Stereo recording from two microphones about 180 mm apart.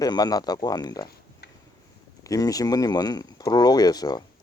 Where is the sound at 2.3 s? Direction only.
20° left (ahead or behind).